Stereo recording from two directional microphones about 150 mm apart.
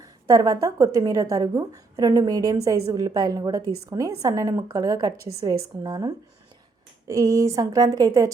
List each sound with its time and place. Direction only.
0.0 s a woman's voice: 25° right (ahead or behind)